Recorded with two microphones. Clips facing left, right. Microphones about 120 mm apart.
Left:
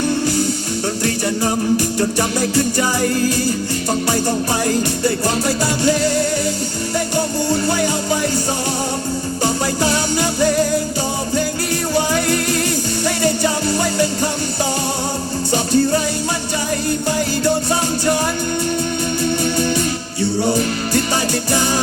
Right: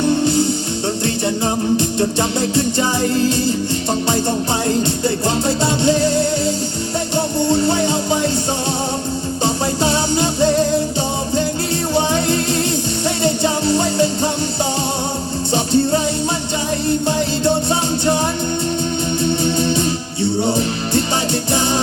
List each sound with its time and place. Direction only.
1.7 s music: 25° right (ahead or behind)
4.6 s music: 25° right (ahead or behind)
7.4 s music: 25° right (ahead or behind)
9.4 s music: 25° right (ahead or behind)
11.9 s music: 25° right (ahead or behind)
15.5 s music: 25° right (ahead or behind)
19.2 s music: 25° right (ahead or behind)